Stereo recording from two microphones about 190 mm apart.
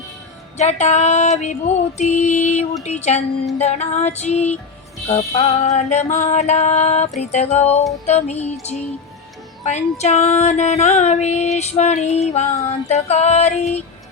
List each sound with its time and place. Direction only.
0.5 s music: 35° left (ahead or behind)
9.6 s music: 35° left (ahead or behind)